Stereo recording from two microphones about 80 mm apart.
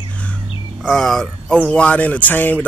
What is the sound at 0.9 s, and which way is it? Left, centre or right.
Speech, centre.